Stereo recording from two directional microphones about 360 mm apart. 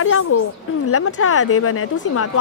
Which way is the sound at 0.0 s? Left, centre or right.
Left.